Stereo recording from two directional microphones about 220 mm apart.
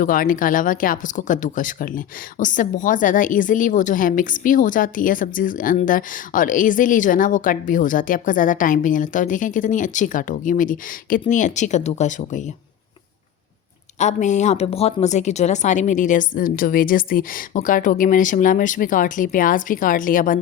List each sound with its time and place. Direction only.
0.0 s speech: 40° left (ahead or behind)
14.0 s speech: 35° left (ahead or behind)